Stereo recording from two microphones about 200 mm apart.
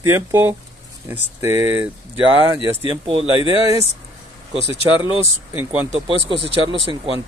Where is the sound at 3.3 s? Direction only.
20° right (ahead or behind).